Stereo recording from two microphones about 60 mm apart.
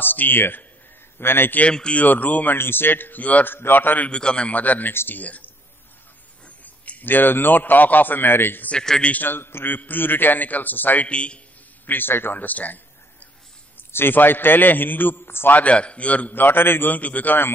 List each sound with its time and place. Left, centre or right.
0.0 s a man's voice: left
1.7 s a man's voice: centre
2.5 s a man's voice: left
4.1 s a man's voice: centre; by 8.6 s left
8.6 s a man's voice: centre
9.1 s a man's voice: left
11.8 s a man's voice: left
15.5 s a man's voice: left